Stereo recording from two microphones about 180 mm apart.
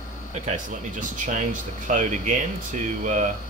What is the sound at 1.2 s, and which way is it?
Speech, 45° right (ahead or behind).